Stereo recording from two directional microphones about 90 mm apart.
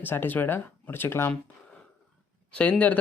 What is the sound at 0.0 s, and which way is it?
Speech, 20° left (ahead or behind).